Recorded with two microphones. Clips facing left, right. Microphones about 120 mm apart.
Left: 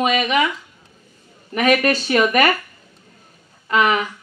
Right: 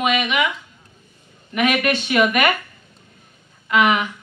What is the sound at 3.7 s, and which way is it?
Speech, 35° left (ahead or behind).